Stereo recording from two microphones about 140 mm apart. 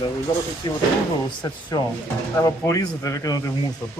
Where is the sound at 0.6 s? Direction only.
30° left (ahead or behind).